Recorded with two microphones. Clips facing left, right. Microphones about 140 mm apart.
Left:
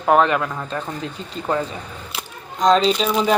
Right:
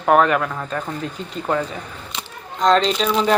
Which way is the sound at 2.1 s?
5° left (ahead or behind).